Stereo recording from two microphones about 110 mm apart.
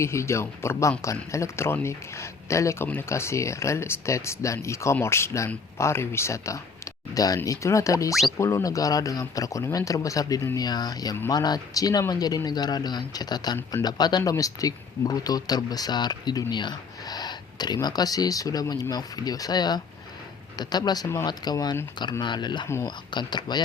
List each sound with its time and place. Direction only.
0.0 s speech: 25° left (ahead or behind); by 23.6 s 40° left (ahead or behind)